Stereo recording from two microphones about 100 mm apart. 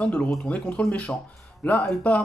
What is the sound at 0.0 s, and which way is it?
Speech, 10° left (ahead or behind).